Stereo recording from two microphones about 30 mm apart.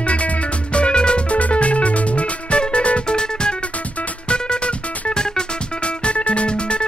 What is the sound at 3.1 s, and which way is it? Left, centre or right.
Music, left.